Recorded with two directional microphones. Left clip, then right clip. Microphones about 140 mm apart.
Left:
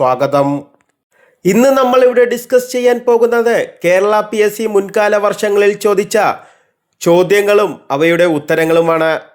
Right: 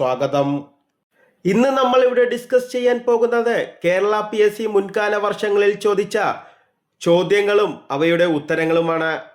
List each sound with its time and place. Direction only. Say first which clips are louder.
0.0 s speech: left 7 dB; 30° left (ahead or behind)
1.4 s speech: left 7 dB; 35° left (ahead or behind)